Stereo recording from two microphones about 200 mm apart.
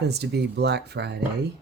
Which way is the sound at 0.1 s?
55° right (ahead or behind).